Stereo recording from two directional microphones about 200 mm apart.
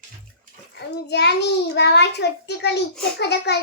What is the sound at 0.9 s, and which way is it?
A child's voice, 55° left (ahead or behind).